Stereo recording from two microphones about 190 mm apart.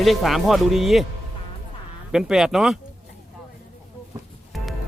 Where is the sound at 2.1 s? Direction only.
5° right (ahead or behind).